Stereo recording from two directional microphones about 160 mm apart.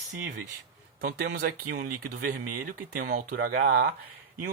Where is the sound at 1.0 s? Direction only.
70° right (ahead or behind).